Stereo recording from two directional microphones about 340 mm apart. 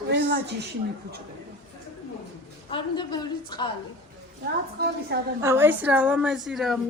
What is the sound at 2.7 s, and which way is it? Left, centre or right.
A woman's voice, centre.